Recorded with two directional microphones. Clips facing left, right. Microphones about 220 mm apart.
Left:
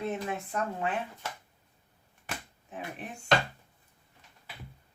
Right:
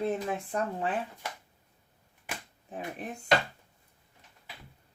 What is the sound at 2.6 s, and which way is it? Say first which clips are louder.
Speech: right 3 dB; 35° right (ahead or behind).